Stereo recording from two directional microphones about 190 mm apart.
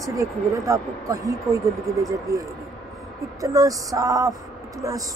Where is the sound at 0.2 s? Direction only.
15° right (ahead or behind).